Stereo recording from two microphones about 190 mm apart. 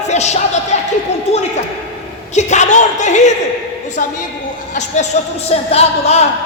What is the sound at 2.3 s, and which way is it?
A woman's voice, 40° left (ahead or behind).